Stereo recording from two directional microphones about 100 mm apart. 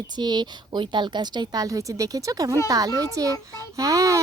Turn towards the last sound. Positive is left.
turn(degrees=-35)  # may be behind; listen again after turning